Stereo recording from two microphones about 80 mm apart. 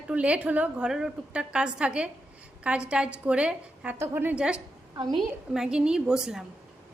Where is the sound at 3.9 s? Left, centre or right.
Right.